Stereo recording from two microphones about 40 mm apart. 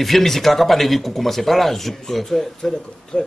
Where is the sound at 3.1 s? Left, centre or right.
Left.